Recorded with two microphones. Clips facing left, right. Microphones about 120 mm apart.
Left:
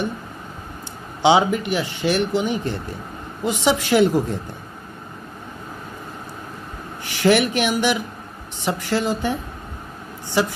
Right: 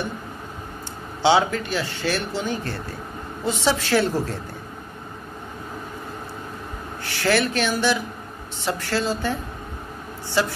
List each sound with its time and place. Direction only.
1.2 s speech: 15° left (ahead or behind)
7.1 s speech: 15° left (ahead or behind)